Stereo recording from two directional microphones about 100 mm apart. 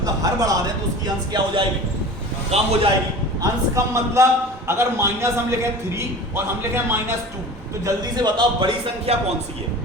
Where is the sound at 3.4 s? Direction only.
30° right (ahead or behind).